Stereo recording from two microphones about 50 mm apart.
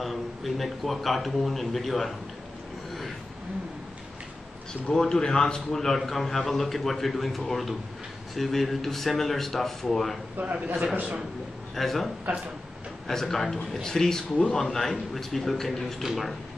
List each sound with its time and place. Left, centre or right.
0.0 s a man's voice: centre
4.9 s a man's voice: centre
10.3 s a man's voice: right
11.7 s a man's voice: centre